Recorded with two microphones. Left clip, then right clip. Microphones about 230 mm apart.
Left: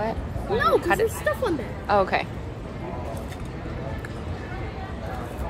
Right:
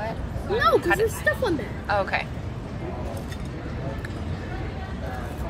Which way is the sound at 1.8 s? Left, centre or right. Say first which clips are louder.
Left 3 dB; left.